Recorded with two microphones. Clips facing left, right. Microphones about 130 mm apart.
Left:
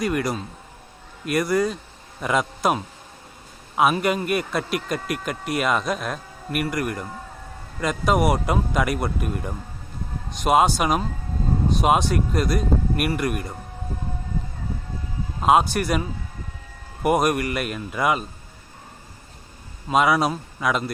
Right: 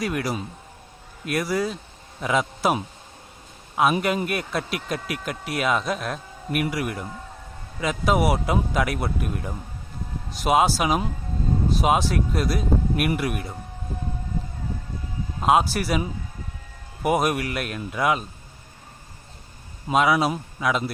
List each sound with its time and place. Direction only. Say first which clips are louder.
0.0 s speech: left 2 dB; centre (ahead or behind)
3.8 s speech: left 1 dB; 5° left (ahead or behind)
15.4 s speech: left 2 dB; centre (ahead or behind)
19.9 s speech: left 1 dB; centre (ahead or behind)